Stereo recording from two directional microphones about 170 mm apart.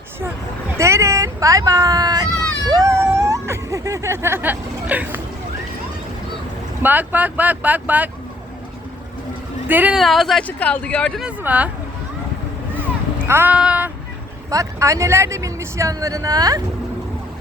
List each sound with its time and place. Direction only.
0.8 s speech: 15° right (ahead or behind)
6.8 s speech: 10° right (ahead or behind)
9.6 s speech: 10° right (ahead or behind)
10.0 s speech: centre (ahead or behind)
11.3 s speech: 10° right (ahead or behind)
13.2 s speech: 15° right (ahead or behind)
14.5 s speech: 20° right (ahead or behind)